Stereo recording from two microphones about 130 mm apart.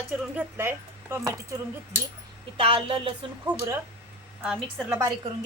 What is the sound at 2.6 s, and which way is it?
Speech, 45° right (ahead or behind).